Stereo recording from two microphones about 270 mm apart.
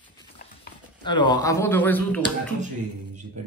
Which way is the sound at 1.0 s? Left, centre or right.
Centre.